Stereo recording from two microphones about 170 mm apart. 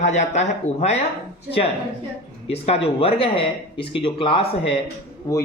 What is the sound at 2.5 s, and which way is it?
Speech, 35° left (ahead or behind).